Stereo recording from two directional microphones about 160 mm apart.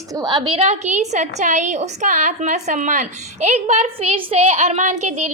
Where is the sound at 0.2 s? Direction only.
25° right (ahead or behind).